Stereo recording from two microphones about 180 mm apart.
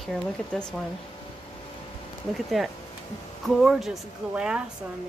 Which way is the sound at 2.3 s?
Centre (ahead or behind).